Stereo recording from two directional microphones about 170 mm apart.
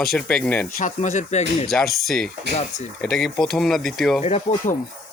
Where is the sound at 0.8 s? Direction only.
45° left (ahead or behind).